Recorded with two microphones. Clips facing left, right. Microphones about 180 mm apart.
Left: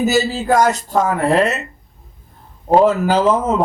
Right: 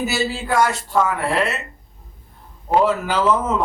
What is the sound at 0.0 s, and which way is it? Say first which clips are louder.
A man's voice: left 6 dB; 40° left (ahead or behind).